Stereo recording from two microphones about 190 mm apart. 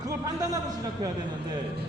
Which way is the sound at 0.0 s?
20° right (ahead or behind).